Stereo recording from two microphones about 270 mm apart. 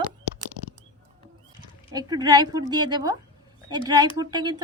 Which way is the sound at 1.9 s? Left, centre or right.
Centre.